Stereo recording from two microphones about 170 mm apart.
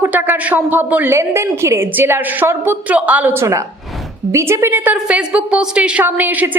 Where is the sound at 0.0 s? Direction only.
10° right (ahead or behind).